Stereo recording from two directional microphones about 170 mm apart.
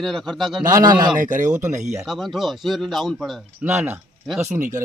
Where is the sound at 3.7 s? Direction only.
15° right (ahead or behind).